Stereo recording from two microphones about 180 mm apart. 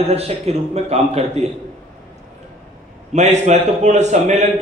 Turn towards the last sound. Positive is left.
turn(degrees=-40)  # may be behind; listen again after turning